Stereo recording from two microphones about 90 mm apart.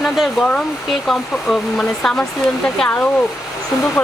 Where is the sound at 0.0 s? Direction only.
5° left (ahead or behind).